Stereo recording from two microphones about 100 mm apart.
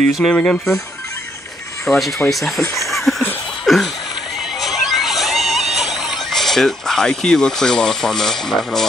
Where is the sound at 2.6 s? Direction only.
30° left (ahead or behind).